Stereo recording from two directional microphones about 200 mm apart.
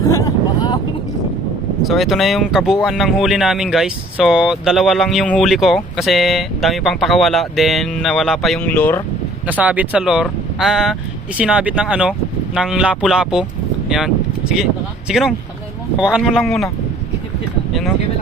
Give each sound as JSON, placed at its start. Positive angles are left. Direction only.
{"t": 0.1, "sound": "vehicle", "side_deg": 15}
{"t": 1.8, "sound": "speech", "side_deg": 0}
{"t": 9.5, "sound": "speech", "side_deg": -5}